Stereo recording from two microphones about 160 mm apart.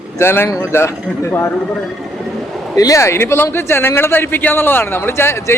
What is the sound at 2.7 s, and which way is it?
A man's voice, 20° left (ahead or behind).